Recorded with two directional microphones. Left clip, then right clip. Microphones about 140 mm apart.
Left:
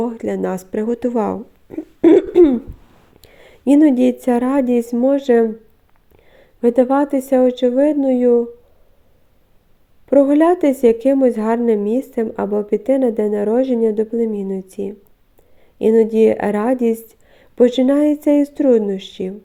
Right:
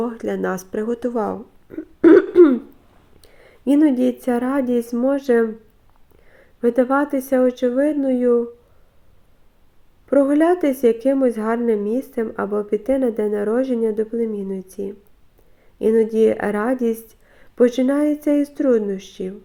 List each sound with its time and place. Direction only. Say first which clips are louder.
0.5 s speech: left 3 dB; 80° left
1.1 s speech: left 3 dB; 45° left (ahead or behind)
2.0 s a sound: even; 25° left (ahead or behind)
3.2 s a sound: left 4 dB; 35° left (ahead or behind)
3.7 s a woman's voice: left 4 dB; 35° left (ahead or behind)
10.1 s a woman's voice: left 3 dB; 30° left (ahead or behind)